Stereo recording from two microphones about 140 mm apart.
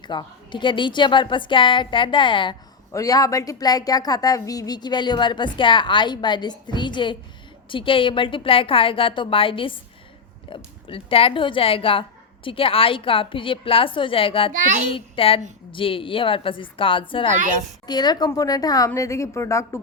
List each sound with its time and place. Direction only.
0.0 s a woman's voice: 35° left (ahead or behind)
2.9 s a woman's voice: 25° left (ahead or behind)